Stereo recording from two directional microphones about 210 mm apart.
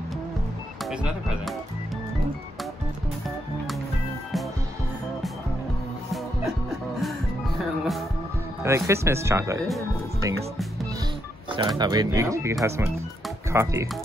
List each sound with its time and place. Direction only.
0.8 s speech: centre (ahead or behind)
7.0 s music: centre (ahead or behind)
8.6 s speech: 15° right (ahead or behind)
11.5 s speech: 20° right (ahead or behind)